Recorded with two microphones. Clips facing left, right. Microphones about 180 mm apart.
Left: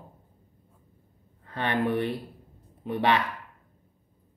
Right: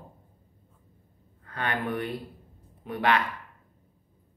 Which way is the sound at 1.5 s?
25° left (ahead or behind).